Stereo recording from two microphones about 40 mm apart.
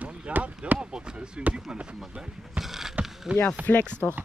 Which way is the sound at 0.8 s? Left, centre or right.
Right.